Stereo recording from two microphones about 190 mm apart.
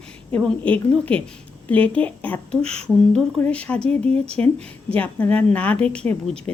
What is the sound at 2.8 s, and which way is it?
A woman's voice, 5° left (ahead or behind).